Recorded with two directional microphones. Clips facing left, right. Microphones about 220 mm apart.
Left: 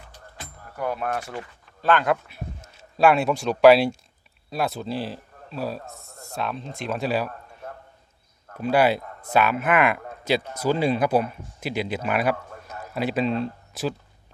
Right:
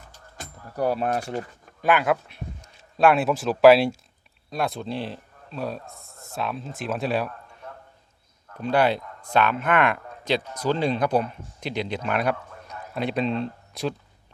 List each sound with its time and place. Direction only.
0.3 s a sound: 35° right (ahead or behind)
1.8 s a man's voice: 10° right (ahead or behind)
8.6 s speech: 5° left (ahead or behind)